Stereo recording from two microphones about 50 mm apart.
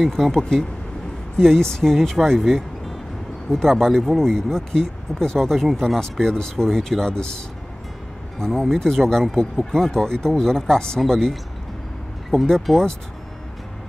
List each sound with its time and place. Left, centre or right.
0.0 s speech: centre
8.5 s speech: centre